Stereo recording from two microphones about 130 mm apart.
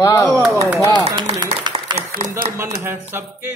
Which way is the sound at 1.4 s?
35° right (ahead or behind).